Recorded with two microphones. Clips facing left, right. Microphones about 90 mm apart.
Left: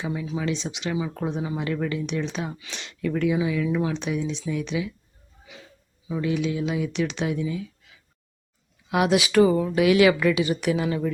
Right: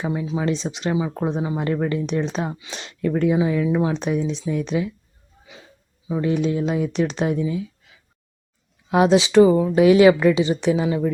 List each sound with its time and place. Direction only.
0.0 s speech: 35° right (ahead or behind)
6.1 s speech: 35° right (ahead or behind)
8.9 s speech: 25° right (ahead or behind)